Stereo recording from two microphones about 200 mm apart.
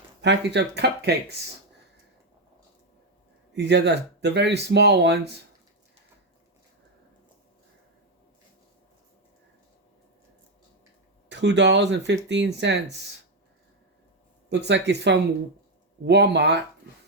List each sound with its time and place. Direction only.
0.2 s speech: 60° right (ahead or behind)
3.5 s speech: 60° right (ahead or behind)
11.3 s speech: 60° right (ahead or behind)
14.5 s speech: 60° right (ahead or behind)